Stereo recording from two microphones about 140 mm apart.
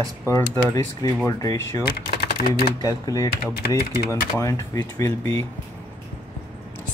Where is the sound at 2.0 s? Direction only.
90° left.